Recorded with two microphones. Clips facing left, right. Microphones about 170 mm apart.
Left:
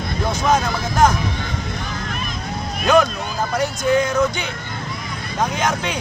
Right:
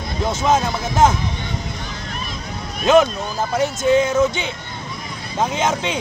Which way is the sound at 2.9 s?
20° right (ahead or behind).